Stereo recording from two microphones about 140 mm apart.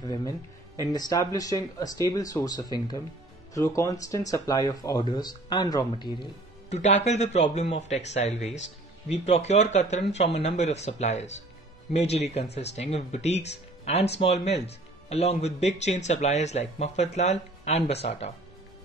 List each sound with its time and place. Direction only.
0.0 s speech: 30° left (ahead or behind)
6.7 s speech: 55° left (ahead or behind)